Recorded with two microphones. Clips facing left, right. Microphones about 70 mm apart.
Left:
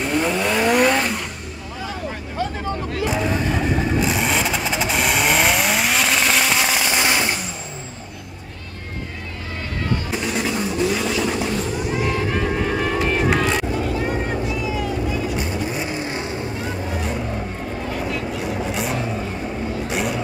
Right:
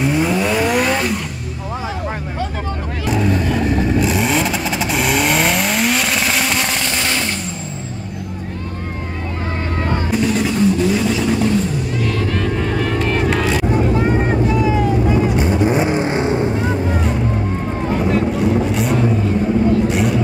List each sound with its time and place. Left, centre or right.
0.0 s vehicle: centre
3.1 s vehicle: centre
10.1 s vehicle: centre
11.9 s vehicle: centre
13.7 s vehicle: right
17.9 s vehicle: right
18.4 s vehicle: centre